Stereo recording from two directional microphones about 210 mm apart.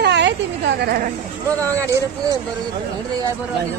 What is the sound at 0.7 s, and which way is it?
Speech, 45° right (ahead or behind).